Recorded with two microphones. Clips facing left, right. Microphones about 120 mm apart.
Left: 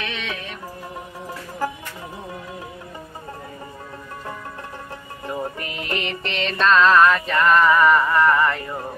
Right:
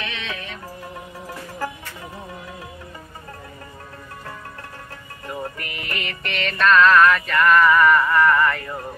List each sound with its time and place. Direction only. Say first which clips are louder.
0.0 s music: left 1 dB; 15° left (ahead or behind)
5.2 s music: left 3 dB; 20° left (ahead or behind)